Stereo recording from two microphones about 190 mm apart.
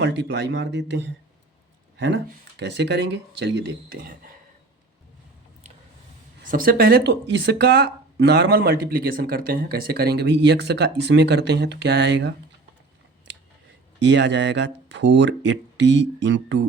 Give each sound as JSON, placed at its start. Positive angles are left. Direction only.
{"t": 0.0, "sound": "speech", "side_deg": -60}
{"t": 6.4, "sound": "speech", "side_deg": -45}
{"t": 14.0, "sound": "speech", "side_deg": -70}